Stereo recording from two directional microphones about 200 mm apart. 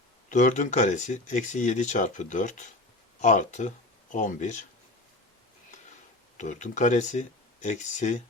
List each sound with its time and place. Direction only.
0.3 s speech: 40° left (ahead or behind)
6.3 s speech: 35° left (ahead or behind)